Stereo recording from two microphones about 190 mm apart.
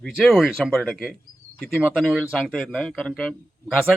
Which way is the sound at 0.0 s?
Centre (ahead or behind).